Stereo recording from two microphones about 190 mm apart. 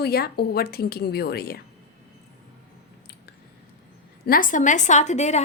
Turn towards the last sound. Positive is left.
turn(degrees=35)  # may be behind; listen again after turning